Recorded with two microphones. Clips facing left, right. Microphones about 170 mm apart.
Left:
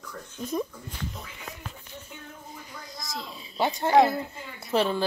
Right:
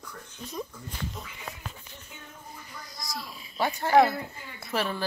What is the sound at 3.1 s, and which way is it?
Speech, 25° left (ahead or behind).